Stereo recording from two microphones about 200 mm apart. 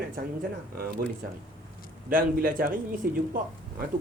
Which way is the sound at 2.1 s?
45° right (ahead or behind).